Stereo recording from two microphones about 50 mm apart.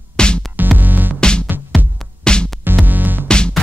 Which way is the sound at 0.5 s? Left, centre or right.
Right.